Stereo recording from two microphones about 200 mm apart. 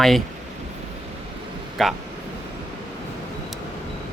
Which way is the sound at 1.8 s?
Centre (ahead or behind).